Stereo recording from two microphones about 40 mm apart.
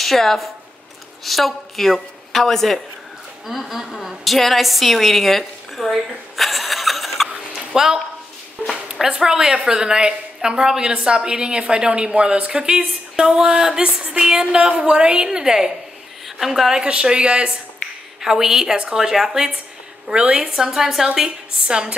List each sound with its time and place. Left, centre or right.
0.0 s a woman's voice: centre
3.4 s a woman's voice: centre
6.3 s snicker: centre
7.7 s speech: centre
8.6 s a sound: centre
9.1 s a woman's voice: centre
16.7 s speech: centre
18.2 s a woman's voice: centre
20.1 s speech: right
20.4 s a woman's voice: centre